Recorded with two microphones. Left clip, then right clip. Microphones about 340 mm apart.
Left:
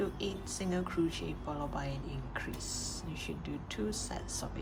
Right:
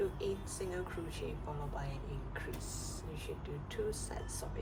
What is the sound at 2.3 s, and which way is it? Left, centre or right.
Speech, left.